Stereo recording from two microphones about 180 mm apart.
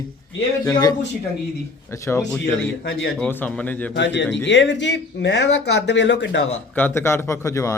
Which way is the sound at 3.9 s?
80° left.